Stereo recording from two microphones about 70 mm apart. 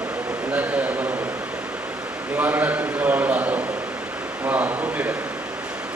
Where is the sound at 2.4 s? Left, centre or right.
Right.